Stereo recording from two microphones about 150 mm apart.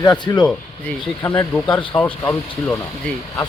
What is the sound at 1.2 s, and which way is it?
Speech, 10° left (ahead or behind).